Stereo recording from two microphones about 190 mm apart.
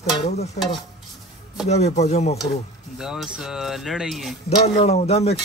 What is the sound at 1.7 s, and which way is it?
Speech, 35° left (ahead or behind).